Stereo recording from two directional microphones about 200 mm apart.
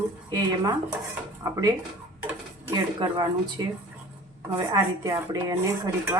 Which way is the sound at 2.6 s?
20° right (ahead or behind).